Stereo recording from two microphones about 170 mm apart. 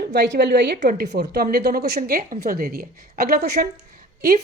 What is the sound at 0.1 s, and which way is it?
Speech, 90° right.